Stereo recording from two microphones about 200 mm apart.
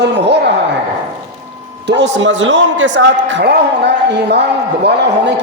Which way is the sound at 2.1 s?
65° right (ahead or behind).